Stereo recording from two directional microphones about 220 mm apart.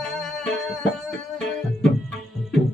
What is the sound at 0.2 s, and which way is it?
Music, centre (ahead or behind).